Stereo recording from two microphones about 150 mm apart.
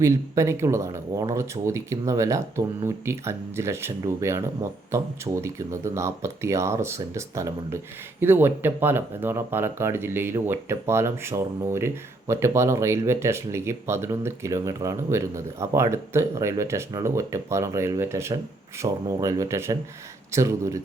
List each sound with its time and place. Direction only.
0.0 s speech: 20° right (ahead or behind)